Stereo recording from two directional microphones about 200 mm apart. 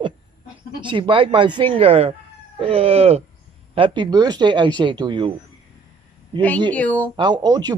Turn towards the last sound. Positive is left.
turn(degrees=-20)  # may be behind; listen again after turning